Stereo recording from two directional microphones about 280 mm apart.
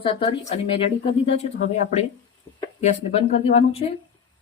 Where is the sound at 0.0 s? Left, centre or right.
Left.